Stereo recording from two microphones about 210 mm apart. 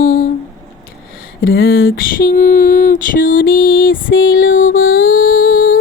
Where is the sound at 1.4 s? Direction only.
45° left (ahead or behind).